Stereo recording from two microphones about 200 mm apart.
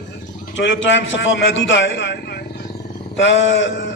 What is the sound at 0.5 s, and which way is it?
A man's voice, 65° left (ahead or behind).